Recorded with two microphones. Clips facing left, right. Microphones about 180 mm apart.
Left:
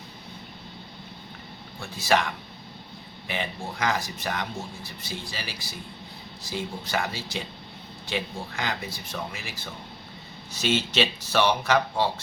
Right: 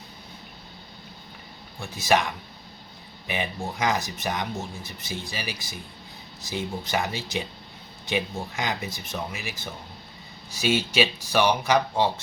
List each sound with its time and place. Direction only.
1.8 s speech: 15° right (ahead or behind)
3.2 s speech: 20° right (ahead or behind)
10.5 s speech: 10° right (ahead or behind)